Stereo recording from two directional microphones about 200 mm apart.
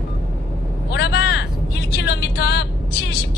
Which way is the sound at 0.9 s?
55° left (ahead or behind).